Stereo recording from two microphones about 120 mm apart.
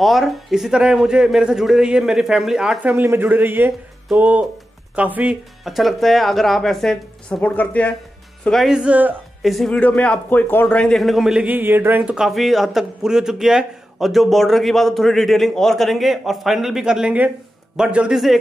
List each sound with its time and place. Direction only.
0.0 s a man's voice: centre (ahead or behind)
5.6 s a man's voice: centre (ahead or behind)
8.5 s a man's voice: centre (ahead or behind)
9.4 s a man's voice: centre (ahead or behind)
9.8 s a man's voice: 15° left (ahead or behind)